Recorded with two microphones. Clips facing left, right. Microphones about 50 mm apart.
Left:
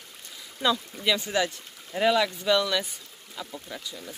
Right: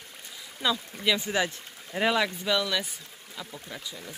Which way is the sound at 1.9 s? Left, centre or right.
Centre.